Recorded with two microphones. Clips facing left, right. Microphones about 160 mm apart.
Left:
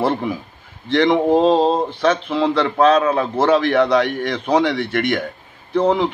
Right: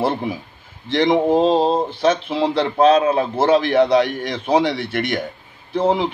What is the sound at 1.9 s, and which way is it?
A man's voice, 25° right (ahead or behind).